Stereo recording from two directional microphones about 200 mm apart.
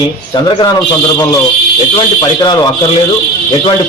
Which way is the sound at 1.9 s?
20° left (ahead or behind).